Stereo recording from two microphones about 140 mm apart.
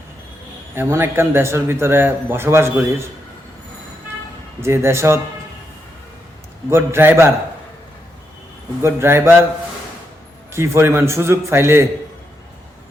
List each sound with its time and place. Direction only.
0.8 s a man's voice: 15° right (ahead or behind)
4.6 s a man's voice: 20° right (ahead or behind)
6.7 s a man's voice: 15° right (ahead or behind)
8.8 s a man's voice: 20° right (ahead or behind)
10.5 s a man's voice: 20° right (ahead or behind)